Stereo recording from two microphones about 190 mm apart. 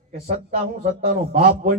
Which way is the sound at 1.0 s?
50° right (ahead or behind).